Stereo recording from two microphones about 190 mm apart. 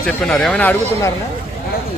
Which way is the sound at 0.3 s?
5° left (ahead or behind).